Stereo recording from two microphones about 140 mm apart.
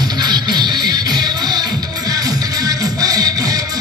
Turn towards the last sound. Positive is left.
turn(degrees=-25)  # may be behind; listen again after turning